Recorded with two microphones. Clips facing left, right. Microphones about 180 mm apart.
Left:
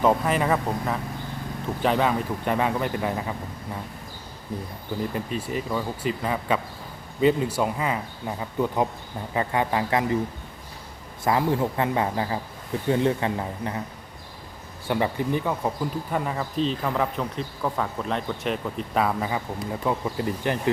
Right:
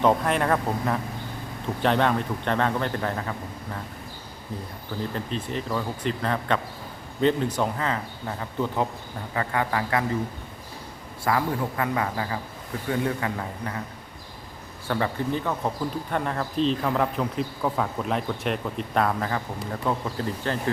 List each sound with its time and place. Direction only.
0.0 s speech: 5° left (ahead or behind)
5.1 s speech: 10° left (ahead or behind)
11.2 s speech: 20° left (ahead or behind)
14.8 s speech: 15° left (ahead or behind)